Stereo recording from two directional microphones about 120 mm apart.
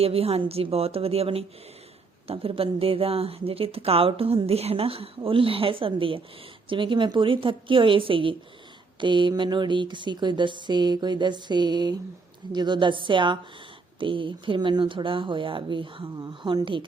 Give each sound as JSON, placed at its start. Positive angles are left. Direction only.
{"t": 0.0, "sound": "a woman's voice", "side_deg": -55}